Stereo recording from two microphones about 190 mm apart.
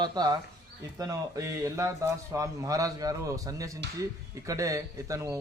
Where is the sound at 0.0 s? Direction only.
20° right (ahead or behind).